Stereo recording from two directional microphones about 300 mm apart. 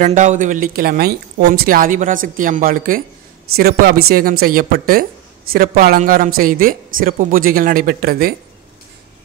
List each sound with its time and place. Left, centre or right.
0.0 s speech: right